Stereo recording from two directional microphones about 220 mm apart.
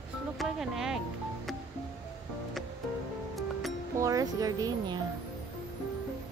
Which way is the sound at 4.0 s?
15° right (ahead or behind).